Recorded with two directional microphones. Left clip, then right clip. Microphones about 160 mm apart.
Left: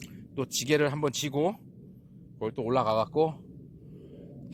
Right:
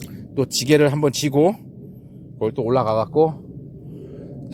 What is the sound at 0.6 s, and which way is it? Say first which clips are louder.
Speech: right 10 dB; 15° right (ahead or behind).